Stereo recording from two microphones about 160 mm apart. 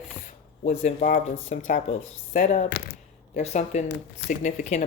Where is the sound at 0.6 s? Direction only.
50° left (ahead or behind).